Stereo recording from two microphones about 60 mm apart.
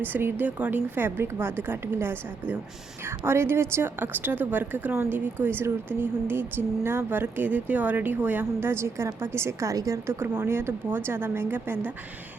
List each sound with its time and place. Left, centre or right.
0.0 s speech: right
8.6 s a woman's voice: right
10.4 s speech: right